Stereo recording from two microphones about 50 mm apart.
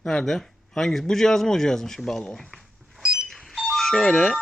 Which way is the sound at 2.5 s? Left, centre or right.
Centre.